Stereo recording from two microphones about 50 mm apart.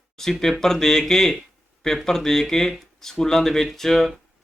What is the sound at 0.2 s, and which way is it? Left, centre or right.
Speech, centre.